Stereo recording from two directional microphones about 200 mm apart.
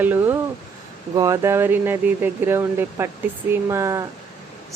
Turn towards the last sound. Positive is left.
turn(degrees=-15)  # may be behind; listen again after turning